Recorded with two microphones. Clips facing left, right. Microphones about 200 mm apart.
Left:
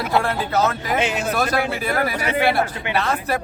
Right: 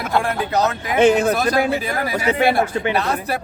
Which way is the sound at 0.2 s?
15° right (ahead or behind).